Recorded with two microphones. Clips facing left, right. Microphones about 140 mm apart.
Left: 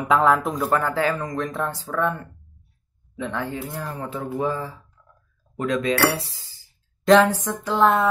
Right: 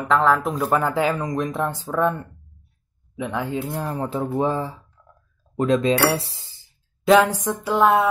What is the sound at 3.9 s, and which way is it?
Speech, 30° right (ahead or behind).